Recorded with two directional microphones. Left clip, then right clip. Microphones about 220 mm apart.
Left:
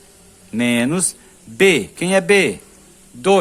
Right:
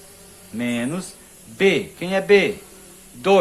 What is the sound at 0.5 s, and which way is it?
A man's voice, 50° left (ahead or behind).